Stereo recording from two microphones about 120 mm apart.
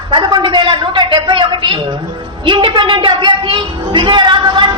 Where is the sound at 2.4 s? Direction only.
40° right (ahead or behind).